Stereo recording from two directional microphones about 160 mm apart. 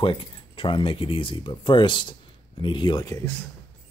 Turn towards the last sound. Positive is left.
turn(degrees=25)  # may be behind; listen again after turning